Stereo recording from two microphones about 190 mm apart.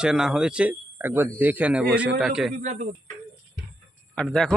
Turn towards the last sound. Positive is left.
turn(degrees=5)  # may be behind; listen again after turning